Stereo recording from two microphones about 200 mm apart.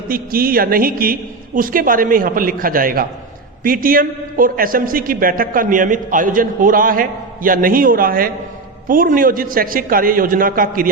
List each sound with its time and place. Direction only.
0.1 s a man's voice: 45° right (ahead or behind)